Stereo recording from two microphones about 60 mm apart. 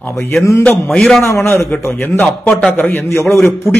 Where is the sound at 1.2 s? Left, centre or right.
Left.